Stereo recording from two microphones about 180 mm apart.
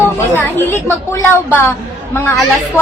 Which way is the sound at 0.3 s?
10° left (ahead or behind).